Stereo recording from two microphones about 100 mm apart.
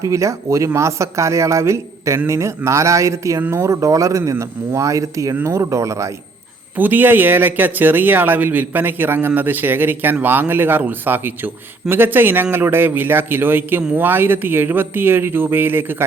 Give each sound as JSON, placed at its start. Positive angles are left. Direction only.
{"t": 0.0, "sound": "speech", "side_deg": -30}
{"t": 6.7, "sound": "speech", "side_deg": -20}